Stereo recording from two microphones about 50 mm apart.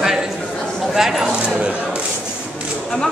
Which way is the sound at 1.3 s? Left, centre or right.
Centre.